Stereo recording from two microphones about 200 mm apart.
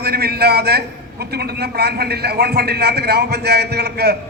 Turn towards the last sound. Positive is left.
turn(degrees=-55)  # may be behind; listen again after turning